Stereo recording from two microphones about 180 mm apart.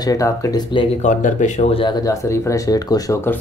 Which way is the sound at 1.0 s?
45° left (ahead or behind).